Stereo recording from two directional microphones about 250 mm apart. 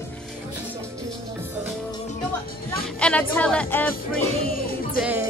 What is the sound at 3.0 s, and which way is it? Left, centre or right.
Music, centre.